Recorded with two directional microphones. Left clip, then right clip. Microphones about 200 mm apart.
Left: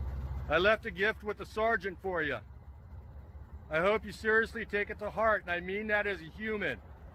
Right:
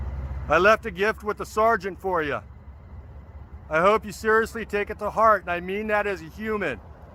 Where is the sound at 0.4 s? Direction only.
20° right (ahead or behind).